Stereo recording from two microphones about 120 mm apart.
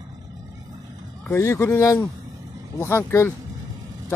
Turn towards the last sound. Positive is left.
turn(degrees=20)  # may be behind; listen again after turning